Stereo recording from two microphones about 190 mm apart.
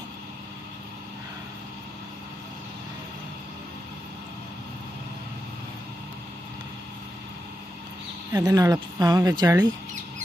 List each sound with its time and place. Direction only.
8.3 s speech: 20° right (ahead or behind)